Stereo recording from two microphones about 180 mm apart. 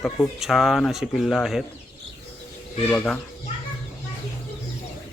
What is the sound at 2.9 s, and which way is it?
Speech, 5° left (ahead or behind).